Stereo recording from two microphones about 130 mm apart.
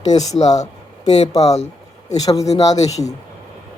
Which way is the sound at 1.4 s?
55° left (ahead or behind).